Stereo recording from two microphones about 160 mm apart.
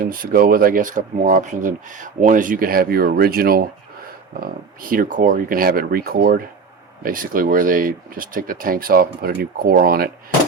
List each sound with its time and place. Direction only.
0.0 s speech: 60° right (ahead or behind)